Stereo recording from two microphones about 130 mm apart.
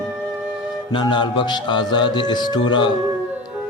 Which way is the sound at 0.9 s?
35° left (ahead or behind).